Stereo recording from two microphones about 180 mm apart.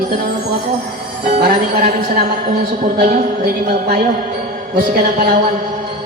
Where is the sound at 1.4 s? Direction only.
55° right (ahead or behind).